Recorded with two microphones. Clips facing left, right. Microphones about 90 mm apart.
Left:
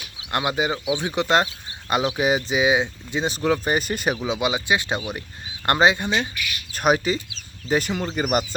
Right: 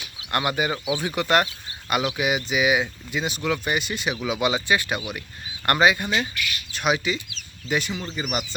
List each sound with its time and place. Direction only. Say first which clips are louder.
0.2 s speech: left 1 dB; 20° left (ahead or behind); by 4.2 s 45° left (ahead or behind)
4.2 s speech: even; 20° left (ahead or behind)
6.7 s speech: left 4 dB; 40° left (ahead or behind)